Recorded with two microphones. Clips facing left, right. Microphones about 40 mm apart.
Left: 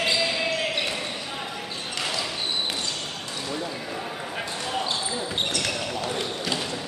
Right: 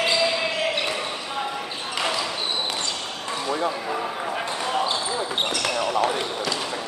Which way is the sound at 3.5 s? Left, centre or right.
Right.